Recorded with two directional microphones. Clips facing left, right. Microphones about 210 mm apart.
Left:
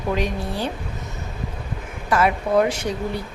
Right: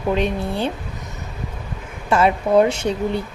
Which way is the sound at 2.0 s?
25° right (ahead or behind).